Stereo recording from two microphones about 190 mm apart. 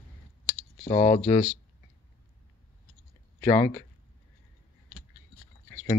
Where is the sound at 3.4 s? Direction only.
15° left (ahead or behind).